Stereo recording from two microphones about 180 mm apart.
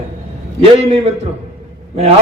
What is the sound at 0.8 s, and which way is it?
Speech, 30° right (ahead or behind).